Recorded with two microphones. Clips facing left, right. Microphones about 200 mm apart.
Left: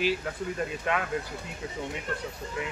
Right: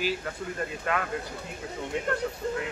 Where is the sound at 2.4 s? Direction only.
55° right (ahead or behind).